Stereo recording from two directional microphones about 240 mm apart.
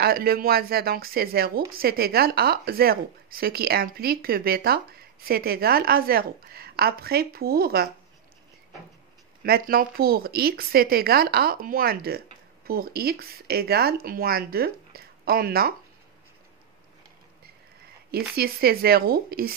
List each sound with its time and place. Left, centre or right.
0.0 s speech: right
9.4 s speech: right
18.1 s speech: right